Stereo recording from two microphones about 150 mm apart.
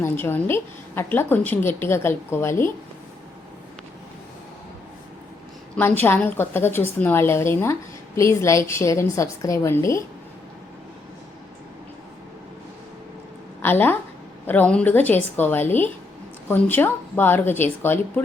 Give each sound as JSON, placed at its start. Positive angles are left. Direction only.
{"t": 0.0, "sound": "a woman's voice", "side_deg": 15}
{"t": 5.7, "sound": "a woman's voice", "side_deg": 10}
{"t": 13.6, "sound": "a woman's voice", "side_deg": 15}